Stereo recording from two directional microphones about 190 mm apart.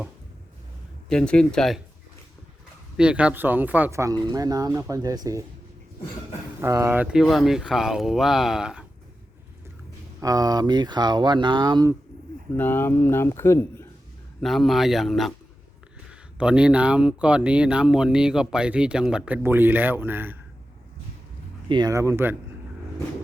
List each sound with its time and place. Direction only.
1.1 s speech: 5° left (ahead or behind)
3.0 s speech: 5° right (ahead or behind)
6.6 s speech: 15° right (ahead or behind)
10.2 s speech: 20° right (ahead or behind)
12.5 s speech: 10° left (ahead or behind)
14.4 s speech: centre (ahead or behind)
21.7 s speech: 20° right (ahead or behind)